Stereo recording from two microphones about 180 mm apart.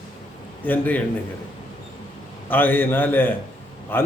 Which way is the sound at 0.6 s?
10° left (ahead or behind).